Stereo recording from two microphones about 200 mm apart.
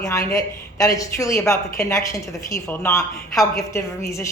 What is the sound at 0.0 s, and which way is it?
A woman's voice, 15° left (ahead or behind).